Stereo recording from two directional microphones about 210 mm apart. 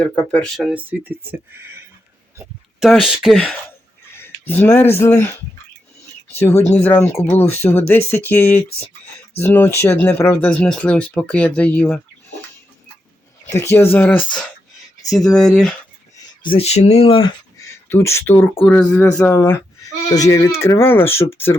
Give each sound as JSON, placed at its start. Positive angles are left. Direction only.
{"t": 0.0, "sound": "speech", "side_deg": 5}
{"t": 6.4, "sound": "speech", "side_deg": 15}
{"t": 13.5, "sound": "speech", "side_deg": 10}
{"t": 16.4, "sound": "speech", "side_deg": 25}
{"t": 17.8, "sound": "speech", "side_deg": 10}